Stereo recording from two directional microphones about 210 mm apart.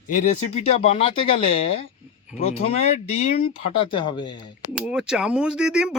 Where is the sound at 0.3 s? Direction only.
30° left (ahead or behind).